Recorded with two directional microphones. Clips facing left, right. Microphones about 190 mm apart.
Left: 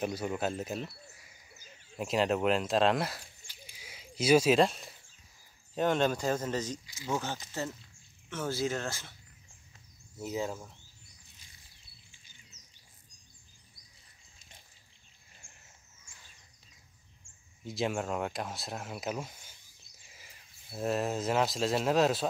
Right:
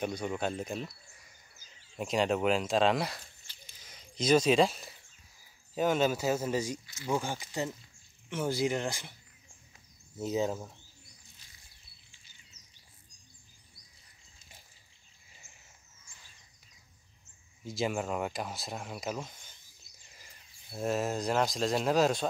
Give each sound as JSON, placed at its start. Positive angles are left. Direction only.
{"t": 0.0, "sound": "speech", "side_deg": 5}
{"t": 3.4, "sound": "a sound", "side_deg": 10}
{"t": 5.8, "sound": "speech", "side_deg": -5}
{"t": 10.1, "sound": "speech", "side_deg": -20}
{"t": 15.3, "sound": "a sound", "side_deg": -5}
{"t": 17.6, "sound": "speech", "side_deg": 0}